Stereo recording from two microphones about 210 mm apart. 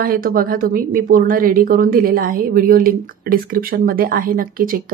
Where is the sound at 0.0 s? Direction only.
45° right (ahead or behind).